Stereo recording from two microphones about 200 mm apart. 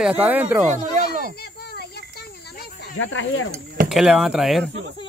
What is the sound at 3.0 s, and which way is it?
Speech, 75° left (ahead or behind).